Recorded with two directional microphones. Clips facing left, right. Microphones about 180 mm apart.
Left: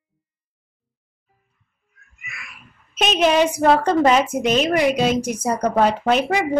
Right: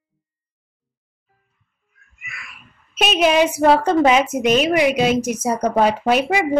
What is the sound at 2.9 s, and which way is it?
A woman's voice, 5° right (ahead or behind).